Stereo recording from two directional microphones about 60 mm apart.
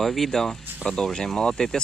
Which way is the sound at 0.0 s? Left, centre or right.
Centre.